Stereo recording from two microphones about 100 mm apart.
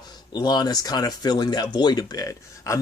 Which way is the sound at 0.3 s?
45° left (ahead or behind).